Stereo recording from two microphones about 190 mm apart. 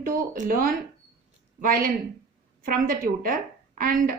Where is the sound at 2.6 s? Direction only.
45° right (ahead or behind).